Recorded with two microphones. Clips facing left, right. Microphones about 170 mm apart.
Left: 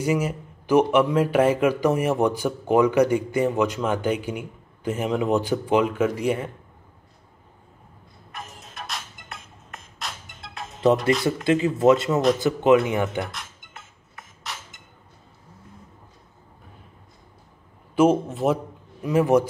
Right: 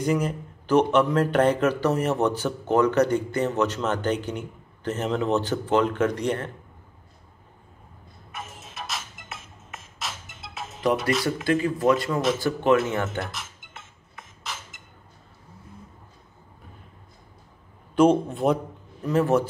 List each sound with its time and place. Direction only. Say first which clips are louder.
0.0 s a man's voice: left 1 dB; 5° left (ahead or behind)
8.3 s music: even; centre (ahead or behind)
11.4 s a man's voice: left 4 dB; 25° left (ahead or behind)
13.2 s music: left 2 dB; centre (ahead or behind)
17.9 s a man's voice: even; 5° left (ahead or behind)
19.0 s a man's voice: left 3 dB; 15° left (ahead or behind)